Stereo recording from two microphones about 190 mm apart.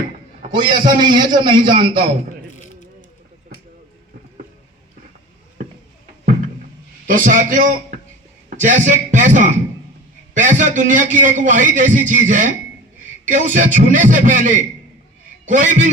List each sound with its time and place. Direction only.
0.5 s a man's voice: 25° right (ahead or behind)
7.1 s a man's voice: 45° right (ahead or behind)